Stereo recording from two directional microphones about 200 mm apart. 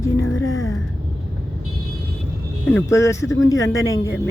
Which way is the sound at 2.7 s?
15° left (ahead or behind).